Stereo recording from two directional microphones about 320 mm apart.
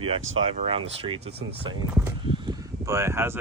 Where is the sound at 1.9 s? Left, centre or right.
Centre.